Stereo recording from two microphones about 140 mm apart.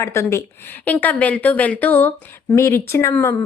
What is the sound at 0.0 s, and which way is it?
Speech, 20° left (ahead or behind).